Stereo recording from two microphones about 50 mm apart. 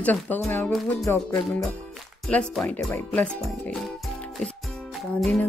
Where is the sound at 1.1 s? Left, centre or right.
Left.